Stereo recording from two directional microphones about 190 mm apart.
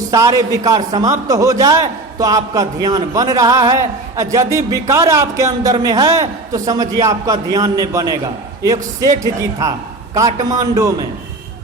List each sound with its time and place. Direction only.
0.1 s a man's voice: 15° right (ahead or behind)
9.2 s a man's voice: 15° right (ahead or behind)